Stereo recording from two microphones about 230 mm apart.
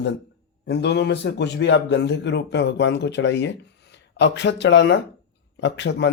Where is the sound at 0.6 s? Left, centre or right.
Left.